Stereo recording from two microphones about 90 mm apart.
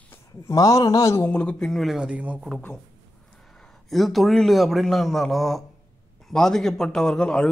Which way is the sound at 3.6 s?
Centre (ahead or behind).